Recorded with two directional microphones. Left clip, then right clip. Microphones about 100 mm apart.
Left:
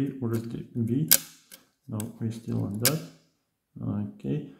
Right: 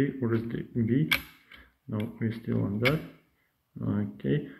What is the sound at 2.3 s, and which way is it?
Speech, 5° right (ahead or behind).